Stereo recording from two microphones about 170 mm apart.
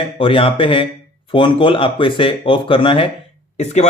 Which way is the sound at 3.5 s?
40° left (ahead or behind).